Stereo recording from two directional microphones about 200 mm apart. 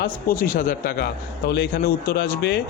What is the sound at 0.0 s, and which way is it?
A man's voice, 45° left (ahead or behind).